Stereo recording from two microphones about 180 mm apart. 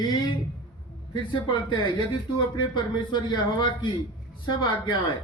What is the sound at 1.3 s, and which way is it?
Speech, 25° left (ahead or behind).